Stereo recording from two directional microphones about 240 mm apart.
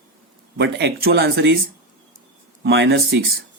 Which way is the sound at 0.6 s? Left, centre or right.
Right.